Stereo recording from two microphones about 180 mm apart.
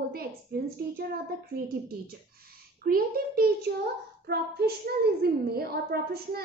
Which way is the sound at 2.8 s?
55° right (ahead or behind).